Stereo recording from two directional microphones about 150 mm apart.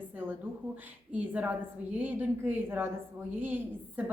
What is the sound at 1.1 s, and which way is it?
A woman's voice, 10° right (ahead or behind).